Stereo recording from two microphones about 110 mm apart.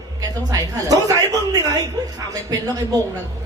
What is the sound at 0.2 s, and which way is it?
A woman's voice, 35° right (ahead or behind).